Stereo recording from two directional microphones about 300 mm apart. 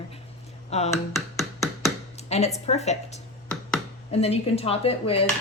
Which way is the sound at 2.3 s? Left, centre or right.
Left.